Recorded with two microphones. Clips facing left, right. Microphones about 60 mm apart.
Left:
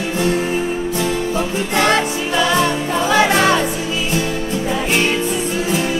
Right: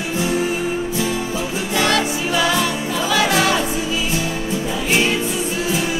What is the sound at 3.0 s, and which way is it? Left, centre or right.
Music, left.